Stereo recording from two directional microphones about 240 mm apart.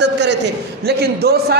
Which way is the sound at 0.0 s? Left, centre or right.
Right.